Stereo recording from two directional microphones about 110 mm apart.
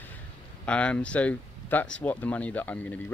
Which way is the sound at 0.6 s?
10° left (ahead or behind).